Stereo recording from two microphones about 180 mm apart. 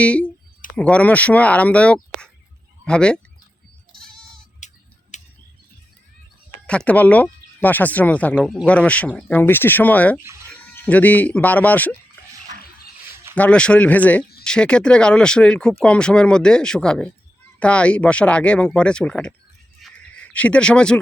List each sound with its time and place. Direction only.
0.0 s speech: 5° left (ahead or behind)
3.9 s goat: 5° left (ahead or behind)
5.1 s tick: 40° left (ahead or behind)
6.7 s speech: 5° left (ahead or behind)
10.2 s speech: 15° right (ahead or behind)
10.8 s speech: 10° left (ahead or behind)
13.3 s speech: 5° left (ahead or behind)
19.8 s a sound: 5° left (ahead or behind)